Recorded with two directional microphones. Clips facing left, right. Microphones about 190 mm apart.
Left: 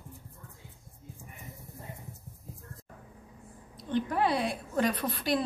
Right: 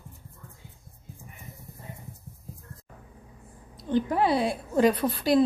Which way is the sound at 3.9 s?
30° right (ahead or behind).